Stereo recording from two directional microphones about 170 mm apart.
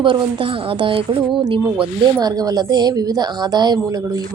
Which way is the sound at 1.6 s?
5° right (ahead or behind).